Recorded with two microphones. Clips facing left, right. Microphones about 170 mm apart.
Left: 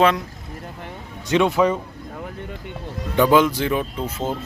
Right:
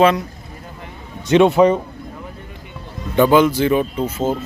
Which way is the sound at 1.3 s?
25° right (ahead or behind).